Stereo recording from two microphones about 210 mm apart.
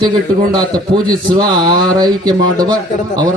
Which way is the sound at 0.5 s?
20° right (ahead or behind).